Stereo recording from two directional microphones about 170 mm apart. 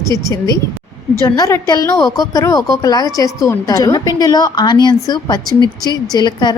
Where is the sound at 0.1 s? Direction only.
20° left (ahead or behind).